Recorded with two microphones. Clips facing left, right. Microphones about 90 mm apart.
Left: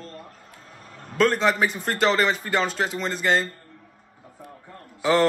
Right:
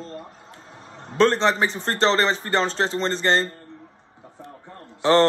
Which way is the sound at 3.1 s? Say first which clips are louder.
Even; 5° left (ahead or behind).